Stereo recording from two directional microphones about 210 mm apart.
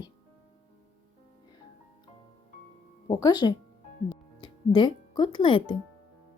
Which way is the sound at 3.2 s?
20° left (ahead or behind).